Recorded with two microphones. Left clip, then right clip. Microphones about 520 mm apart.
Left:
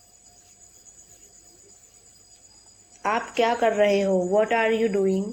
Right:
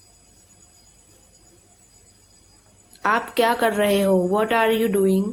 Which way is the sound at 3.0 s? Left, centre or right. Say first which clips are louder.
Right 4 dB; right.